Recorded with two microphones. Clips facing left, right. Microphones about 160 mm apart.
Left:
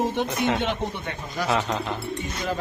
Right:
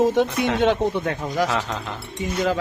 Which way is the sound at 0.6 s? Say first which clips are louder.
Right 8 dB; 90° right.